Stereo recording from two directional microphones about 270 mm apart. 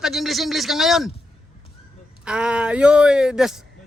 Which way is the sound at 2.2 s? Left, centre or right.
Centre.